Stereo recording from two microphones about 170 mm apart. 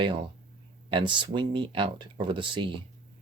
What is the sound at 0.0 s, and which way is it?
Speech, 30° right (ahead or behind).